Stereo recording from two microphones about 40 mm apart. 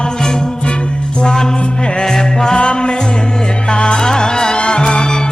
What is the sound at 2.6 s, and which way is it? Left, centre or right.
Music, left.